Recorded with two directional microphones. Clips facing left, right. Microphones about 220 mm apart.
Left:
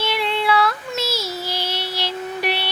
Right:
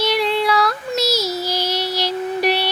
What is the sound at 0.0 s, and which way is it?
Child singing, 40° right (ahead or behind).